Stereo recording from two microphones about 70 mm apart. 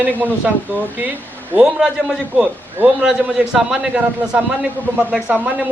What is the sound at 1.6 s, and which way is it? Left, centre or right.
A man's voice, centre.